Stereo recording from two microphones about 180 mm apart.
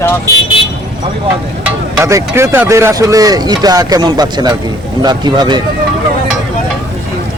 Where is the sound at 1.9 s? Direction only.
15° right (ahead or behind).